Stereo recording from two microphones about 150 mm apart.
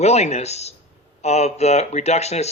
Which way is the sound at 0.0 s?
45° left (ahead or behind).